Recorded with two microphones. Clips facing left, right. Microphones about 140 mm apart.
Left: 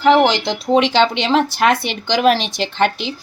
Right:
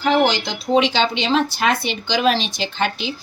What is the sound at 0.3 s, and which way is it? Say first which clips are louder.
Speech: left 3 dB; 70° left (ahead or behind).